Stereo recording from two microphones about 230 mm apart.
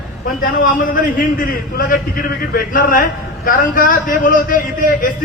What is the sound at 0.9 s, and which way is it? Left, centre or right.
A man's voice, left.